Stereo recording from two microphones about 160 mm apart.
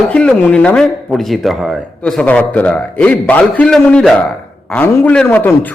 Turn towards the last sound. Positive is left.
turn(degrees=15)  # may be behind; listen again after turning